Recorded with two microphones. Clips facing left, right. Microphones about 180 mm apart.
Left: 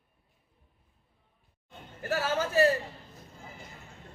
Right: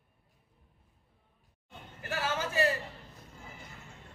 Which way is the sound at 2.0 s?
40° left (ahead or behind).